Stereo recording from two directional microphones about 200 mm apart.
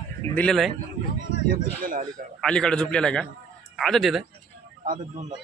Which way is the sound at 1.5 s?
45° right (ahead or behind).